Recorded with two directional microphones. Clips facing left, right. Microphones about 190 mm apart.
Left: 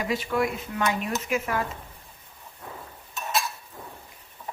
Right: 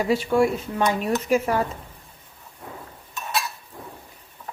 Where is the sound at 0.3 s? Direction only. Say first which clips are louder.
Right 6 dB; 30° right (ahead or behind).